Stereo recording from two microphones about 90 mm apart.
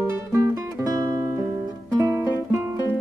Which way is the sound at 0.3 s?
40° right (ahead or behind).